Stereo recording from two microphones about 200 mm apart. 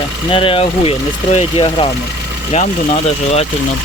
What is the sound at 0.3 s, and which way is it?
Speech, 25° left (ahead or behind).